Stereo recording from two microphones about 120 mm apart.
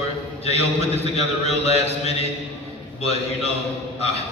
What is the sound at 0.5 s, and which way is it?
A man's voice, 60° left (ahead or behind).